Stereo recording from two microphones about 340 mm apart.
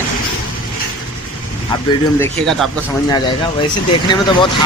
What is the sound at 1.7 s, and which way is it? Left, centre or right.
Speech, centre.